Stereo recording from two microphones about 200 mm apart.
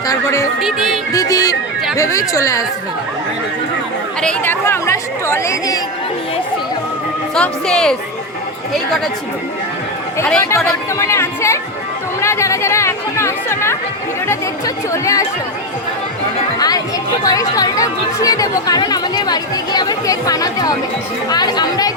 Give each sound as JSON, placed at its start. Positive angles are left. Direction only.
{"t": 0.1, "sound": "music", "side_deg": 15}
{"t": 0.6, "sound": "speech", "side_deg": 0}
{"t": 1.1, "sound": "music", "side_deg": 20}
{"t": 2.0, "sound": "speech", "side_deg": 15}
{"t": 4.2, "sound": "speech", "side_deg": 10}
{"t": 7.3, "sound": "speech", "side_deg": 5}
{"t": 10.2, "sound": "speech", "side_deg": 10}
{"t": 14.9, "sound": "speech", "side_deg": 15}
{"t": 16.6, "sound": "speech", "side_deg": 20}